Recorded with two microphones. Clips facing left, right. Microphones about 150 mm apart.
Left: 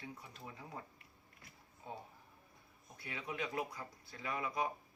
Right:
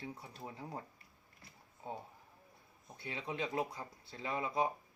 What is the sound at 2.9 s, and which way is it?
Speech, 25° right (ahead or behind).